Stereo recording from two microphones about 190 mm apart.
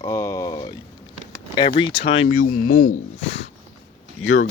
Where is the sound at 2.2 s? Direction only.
45° left (ahead or behind).